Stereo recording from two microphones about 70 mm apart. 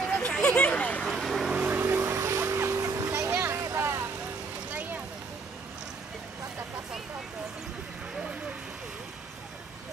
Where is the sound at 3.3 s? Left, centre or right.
Right.